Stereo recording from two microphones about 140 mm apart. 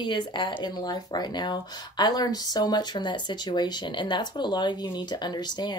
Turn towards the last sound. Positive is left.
turn(degrees=30)  # may be behind; listen again after turning